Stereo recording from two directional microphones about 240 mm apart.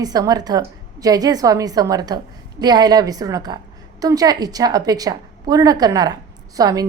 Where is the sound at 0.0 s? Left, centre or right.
Centre.